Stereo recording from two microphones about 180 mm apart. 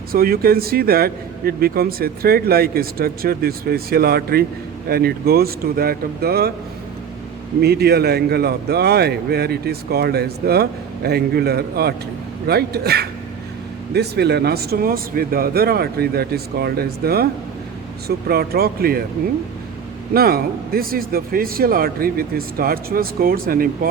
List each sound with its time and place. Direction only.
0.1 s speech: 55° right (ahead or behind)
7.6 s speech: 65° right (ahead or behind)
18.3 s speech: 60° right (ahead or behind)
20.1 s speech: 55° right (ahead or behind)